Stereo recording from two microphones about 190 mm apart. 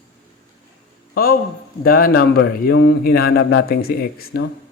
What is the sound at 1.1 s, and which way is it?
A man's voice, 50° left (ahead or behind).